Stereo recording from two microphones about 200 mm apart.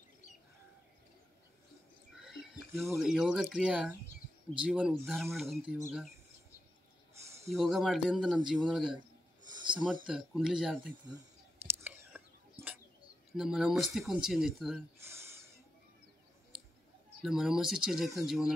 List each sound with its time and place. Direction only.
2.1 s a sound: centre (ahead or behind)
3.0 s speech: centre (ahead or behind)
7.5 s speech: centre (ahead or behind)
9.5 s a sound: 25° right (ahead or behind)
10.0 s speech: 5° right (ahead or behind)
11.8 s whispering: 10° right (ahead or behind)
13.3 s speech: centre (ahead or behind)
15.0 s a sound: 15° right (ahead or behind)
17.2 s speech: centre (ahead or behind)